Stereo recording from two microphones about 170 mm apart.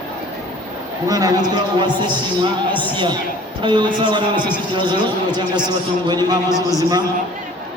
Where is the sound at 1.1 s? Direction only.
20° right (ahead or behind).